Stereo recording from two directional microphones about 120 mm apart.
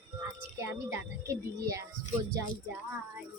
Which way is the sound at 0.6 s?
25° right (ahead or behind).